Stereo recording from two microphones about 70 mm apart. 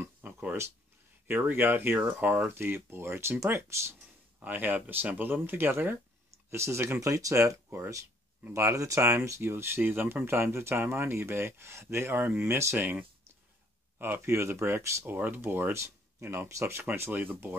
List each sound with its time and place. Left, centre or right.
0.2 s a sound: right
1.2 s speech: right
4.4 s speech: right
6.5 s speech: right
15.0 s speech: right
16.9 s speech: right